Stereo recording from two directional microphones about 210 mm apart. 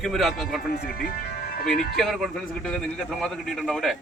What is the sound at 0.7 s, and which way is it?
Speech, 45° left (ahead or behind).